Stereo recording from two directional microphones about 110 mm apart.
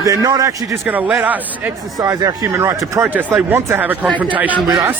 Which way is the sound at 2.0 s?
30° right (ahead or behind).